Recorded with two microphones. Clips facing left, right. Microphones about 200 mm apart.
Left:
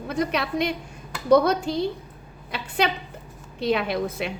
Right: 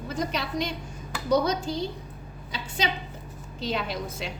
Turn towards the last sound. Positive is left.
turn(degrees=60)  # may be behind; listen again after turning